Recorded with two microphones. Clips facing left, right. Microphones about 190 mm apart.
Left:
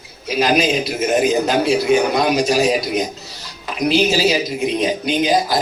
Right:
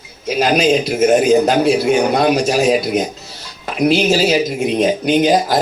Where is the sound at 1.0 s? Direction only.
45° right (ahead or behind).